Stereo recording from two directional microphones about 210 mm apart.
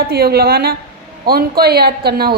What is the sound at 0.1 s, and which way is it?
Speech, 50° right (ahead or behind).